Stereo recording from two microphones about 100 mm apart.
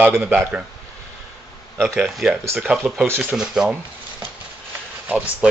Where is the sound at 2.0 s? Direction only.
Centre (ahead or behind).